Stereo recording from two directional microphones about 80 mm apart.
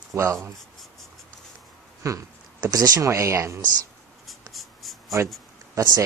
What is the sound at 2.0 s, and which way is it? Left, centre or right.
Speech, right.